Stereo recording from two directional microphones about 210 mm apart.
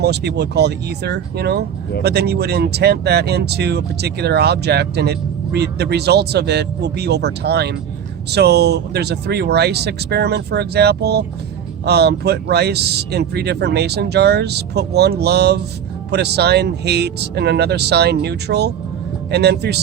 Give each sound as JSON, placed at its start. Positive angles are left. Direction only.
{"t": 0.0, "sound": "speech", "side_deg": -50}